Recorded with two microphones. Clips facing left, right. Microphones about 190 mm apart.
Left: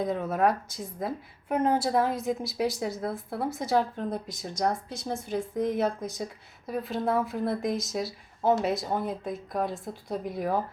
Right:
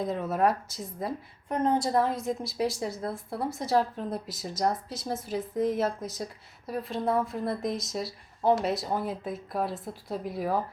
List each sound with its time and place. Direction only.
0.0 s a woman's voice: centre (ahead or behind)